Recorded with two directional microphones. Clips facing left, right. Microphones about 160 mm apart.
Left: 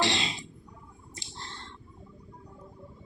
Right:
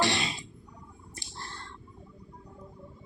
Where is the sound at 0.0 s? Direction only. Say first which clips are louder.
Right 1 dB; 20° left (ahead or behind).